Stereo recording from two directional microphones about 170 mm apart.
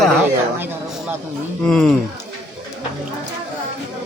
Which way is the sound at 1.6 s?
5° left (ahead or behind).